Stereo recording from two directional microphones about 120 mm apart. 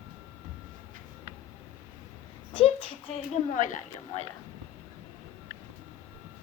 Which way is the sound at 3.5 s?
90° left.